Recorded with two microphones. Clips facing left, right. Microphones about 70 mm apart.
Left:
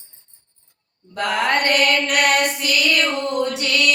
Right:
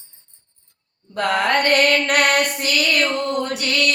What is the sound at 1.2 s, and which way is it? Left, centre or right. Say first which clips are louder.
Mantra: right 1 dB; right.